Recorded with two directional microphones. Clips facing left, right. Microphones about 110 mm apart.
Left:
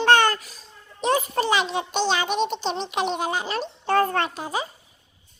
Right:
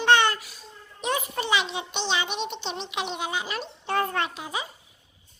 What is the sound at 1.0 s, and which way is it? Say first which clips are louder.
A child's voice: left 6 dB; 35° left (ahead or behind).